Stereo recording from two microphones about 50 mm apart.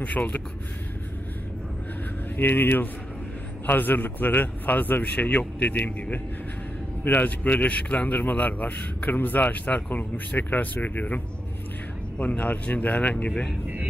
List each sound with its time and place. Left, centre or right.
0.0 s speech: left
2.3 s speech: left
5.0 s a man's voice: left